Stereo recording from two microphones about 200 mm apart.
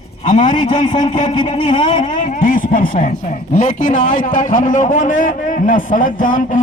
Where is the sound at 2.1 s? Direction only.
40° left (ahead or behind).